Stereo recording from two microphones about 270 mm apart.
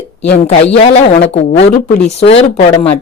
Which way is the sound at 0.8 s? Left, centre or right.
Left.